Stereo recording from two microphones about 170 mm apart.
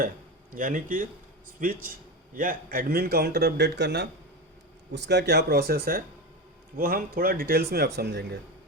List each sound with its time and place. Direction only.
0.5 s a man's voice: 50° right (ahead or behind); by 8.4 s 80° right